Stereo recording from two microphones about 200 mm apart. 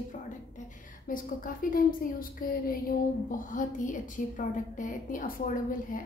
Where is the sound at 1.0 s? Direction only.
45° left (ahead or behind).